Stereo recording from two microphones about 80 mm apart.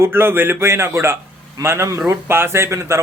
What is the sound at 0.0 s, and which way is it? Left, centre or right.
A man's voice, right.